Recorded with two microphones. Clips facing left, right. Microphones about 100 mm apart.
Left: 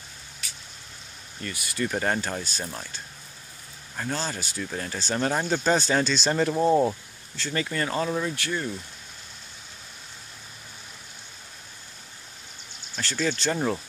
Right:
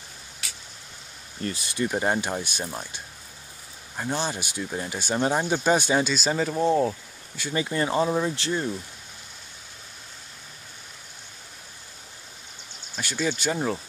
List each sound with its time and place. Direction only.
1.4 s speech: 30° right (ahead or behind); by 7.0 s 5° left (ahead or behind)
7.3 s speech: 15° right (ahead or behind)
12.9 s speech: 10° right (ahead or behind)